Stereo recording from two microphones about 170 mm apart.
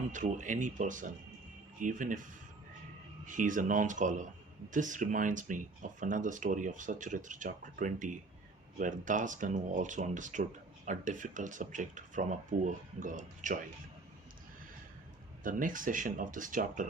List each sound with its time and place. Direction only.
0.1 s speech: 45° right (ahead or behind)
3.2 s speech: 50° right (ahead or behind)
15.4 s speech: 50° right (ahead or behind)